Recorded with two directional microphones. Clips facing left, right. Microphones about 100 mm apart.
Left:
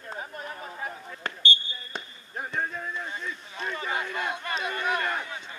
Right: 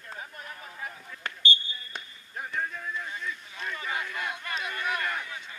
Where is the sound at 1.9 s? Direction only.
30° left (ahead or behind).